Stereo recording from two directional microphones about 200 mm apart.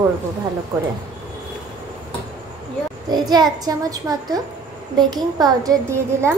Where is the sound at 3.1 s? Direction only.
20° right (ahead or behind).